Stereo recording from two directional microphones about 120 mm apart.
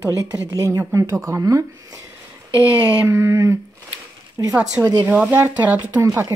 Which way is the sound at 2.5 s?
10° right (ahead or behind).